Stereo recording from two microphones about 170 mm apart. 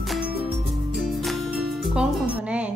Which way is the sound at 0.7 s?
Centre (ahead or behind).